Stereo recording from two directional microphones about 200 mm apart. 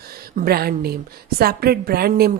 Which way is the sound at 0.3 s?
50° right (ahead or behind).